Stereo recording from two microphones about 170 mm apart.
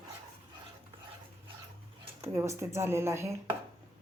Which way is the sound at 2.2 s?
15° right (ahead or behind).